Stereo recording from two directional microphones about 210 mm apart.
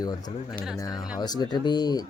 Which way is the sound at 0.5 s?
Centre (ahead or behind).